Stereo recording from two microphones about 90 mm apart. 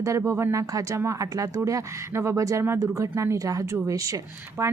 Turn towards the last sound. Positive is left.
turn(degrees=-30)  # may be behind; listen again after turning